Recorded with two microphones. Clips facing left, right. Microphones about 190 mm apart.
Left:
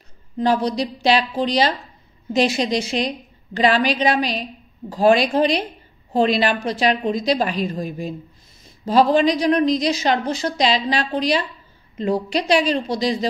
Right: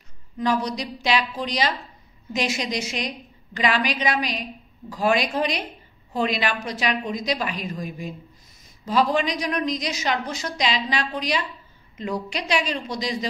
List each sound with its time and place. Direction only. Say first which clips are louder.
0.4 s a woman's voice: left 5 dB; 30° left (ahead or behind)